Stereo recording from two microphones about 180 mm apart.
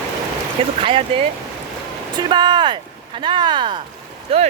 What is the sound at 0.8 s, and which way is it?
Speech, 30° right (ahead or behind).